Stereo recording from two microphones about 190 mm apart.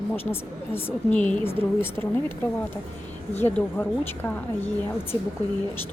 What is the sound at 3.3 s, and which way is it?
A woman's voice, 10° left (ahead or behind).